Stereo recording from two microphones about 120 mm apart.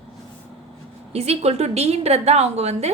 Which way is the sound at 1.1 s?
60° right (ahead or behind).